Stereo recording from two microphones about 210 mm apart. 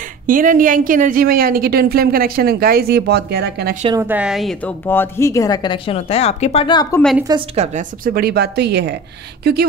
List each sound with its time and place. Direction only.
0.3 s a woman's voice: 40° right (ahead or behind)
4.0 s speech: 5° right (ahead or behind); by 7.0 s 20° left (ahead or behind)
7.2 s a woman's voice: 25° right (ahead or behind); by 9.7 s 50° right (ahead or behind)